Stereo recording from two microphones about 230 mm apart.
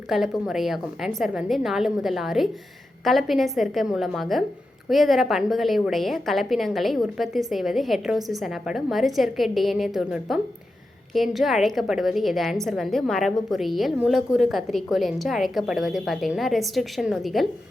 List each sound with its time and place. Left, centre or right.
0.1 s a woman's voice: centre